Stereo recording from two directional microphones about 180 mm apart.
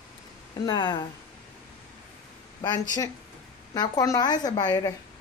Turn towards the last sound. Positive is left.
turn(degrees=20)  # may be behind; listen again after turning